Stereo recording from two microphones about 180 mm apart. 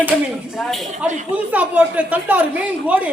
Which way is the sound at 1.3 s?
10° right (ahead or behind).